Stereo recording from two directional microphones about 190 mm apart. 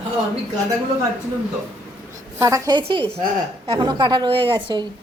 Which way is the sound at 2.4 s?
15° right (ahead or behind).